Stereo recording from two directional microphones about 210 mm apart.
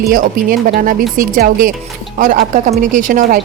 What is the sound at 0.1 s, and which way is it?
Speech, 45° right (ahead or behind).